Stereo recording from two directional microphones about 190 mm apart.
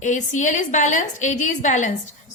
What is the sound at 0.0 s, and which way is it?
A woman's voice, 40° left (ahead or behind).